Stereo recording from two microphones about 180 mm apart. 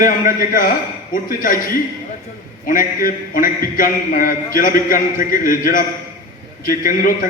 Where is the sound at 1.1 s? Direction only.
50° left (ahead or behind).